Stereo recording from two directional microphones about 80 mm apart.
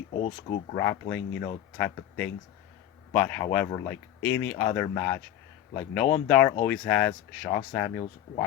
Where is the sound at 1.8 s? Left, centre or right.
Centre.